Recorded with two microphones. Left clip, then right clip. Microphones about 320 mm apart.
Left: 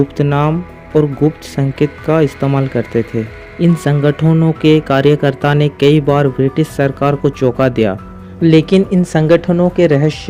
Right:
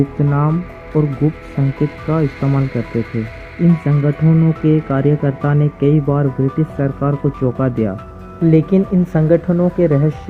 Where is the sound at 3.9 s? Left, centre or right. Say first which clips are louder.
Left 5 dB; left.